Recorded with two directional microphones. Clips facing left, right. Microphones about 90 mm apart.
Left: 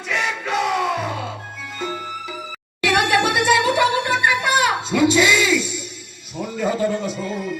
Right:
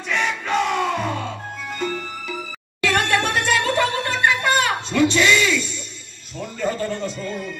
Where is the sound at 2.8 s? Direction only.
10° left (ahead or behind).